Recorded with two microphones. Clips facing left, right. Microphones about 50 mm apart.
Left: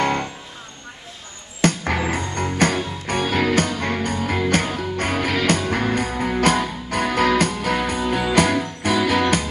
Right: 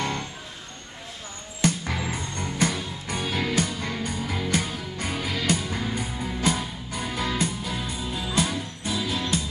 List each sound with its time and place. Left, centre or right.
0.0 s music: left
1.6 s music: left